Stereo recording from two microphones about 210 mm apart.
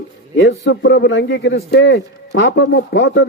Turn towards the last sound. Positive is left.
turn(degrees=55)  # may be behind; listen again after turning